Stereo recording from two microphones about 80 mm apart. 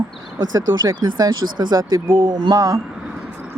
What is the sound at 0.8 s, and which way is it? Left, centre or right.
Speech, right.